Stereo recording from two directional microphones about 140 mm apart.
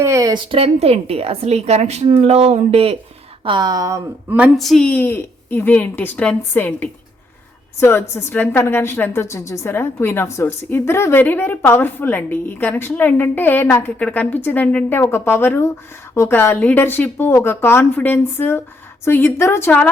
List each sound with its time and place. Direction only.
0.0 s speech: 20° right (ahead or behind)
0.5 s a woman's voice: 45° right (ahead or behind)
3.4 s speech: 30° right (ahead or behind)
4.3 s a woman's voice: 10° right (ahead or behind)
4.5 s a woman's voice: centre (ahead or behind)